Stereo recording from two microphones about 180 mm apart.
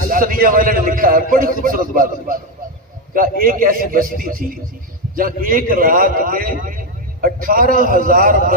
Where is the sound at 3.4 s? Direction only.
50° right (ahead or behind).